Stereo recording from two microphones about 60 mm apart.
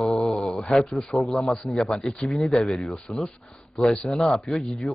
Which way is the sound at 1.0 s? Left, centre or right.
Centre.